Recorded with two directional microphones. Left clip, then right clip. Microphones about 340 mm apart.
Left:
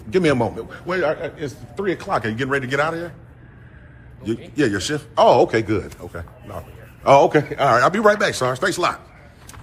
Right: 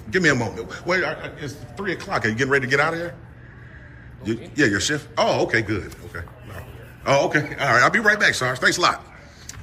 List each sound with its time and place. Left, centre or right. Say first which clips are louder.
0.1 s a man's voice: left 1 dB; centre
4.2 s a man's voice: even; centre